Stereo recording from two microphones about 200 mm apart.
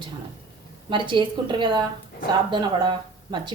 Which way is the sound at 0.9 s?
25° right (ahead or behind).